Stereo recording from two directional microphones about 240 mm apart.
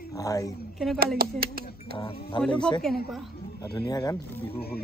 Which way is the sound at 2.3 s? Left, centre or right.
Centre.